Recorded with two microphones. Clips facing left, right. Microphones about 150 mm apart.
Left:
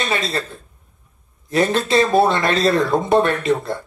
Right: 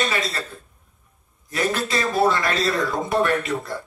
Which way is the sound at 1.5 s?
25° left (ahead or behind).